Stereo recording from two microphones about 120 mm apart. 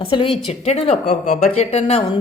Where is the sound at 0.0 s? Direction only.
50° left (ahead or behind).